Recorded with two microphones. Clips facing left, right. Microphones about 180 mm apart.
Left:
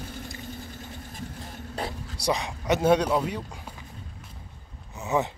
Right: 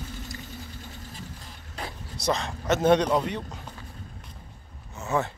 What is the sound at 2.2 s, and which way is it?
Speech, 15° left (ahead or behind).